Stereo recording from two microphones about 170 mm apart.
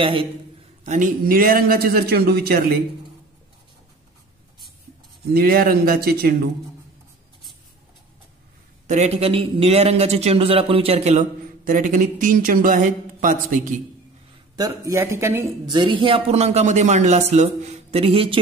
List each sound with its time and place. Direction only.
0.0 s a man's voice: 30° right (ahead or behind)
0.8 s a man's voice: 50° right (ahead or behind)
5.3 s a man's voice: 60° right (ahead or behind)
8.8 s a man's voice: 40° right (ahead or behind)
14.6 s speech: 15° right (ahead or behind)
15.7 s a man's voice: 30° right (ahead or behind)